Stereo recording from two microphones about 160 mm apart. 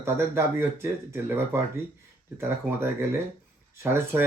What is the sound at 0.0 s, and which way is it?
Speech, 15° right (ahead or behind).